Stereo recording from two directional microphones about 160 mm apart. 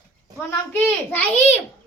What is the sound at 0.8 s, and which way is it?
Speech, 10° left (ahead or behind).